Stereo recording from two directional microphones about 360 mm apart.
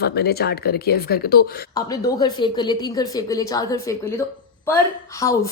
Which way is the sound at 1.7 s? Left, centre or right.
Centre.